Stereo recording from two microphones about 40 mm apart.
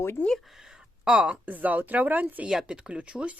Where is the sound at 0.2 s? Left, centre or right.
Left.